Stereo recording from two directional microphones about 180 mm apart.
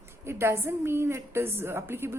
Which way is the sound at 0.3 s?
15° right (ahead or behind).